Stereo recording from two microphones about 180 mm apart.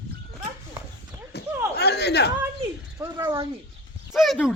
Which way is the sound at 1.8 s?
65° left (ahead or behind).